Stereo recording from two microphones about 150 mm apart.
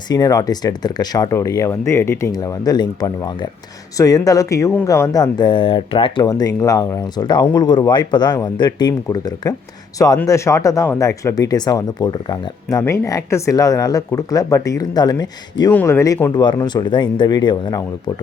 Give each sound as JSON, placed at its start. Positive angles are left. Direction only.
{"t": 0.1, "sound": "speech", "side_deg": 25}
{"t": 15.7, "sound": "speech", "side_deg": 15}
{"t": 16.3, "sound": "speech", "side_deg": 30}